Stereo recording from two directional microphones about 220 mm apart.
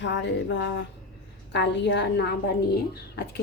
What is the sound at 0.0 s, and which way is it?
A woman's voice, 55° left (ahead or behind).